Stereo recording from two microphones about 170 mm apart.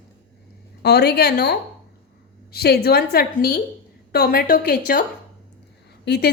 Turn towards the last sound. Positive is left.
turn(degrees=75)  # may be behind; listen again after turning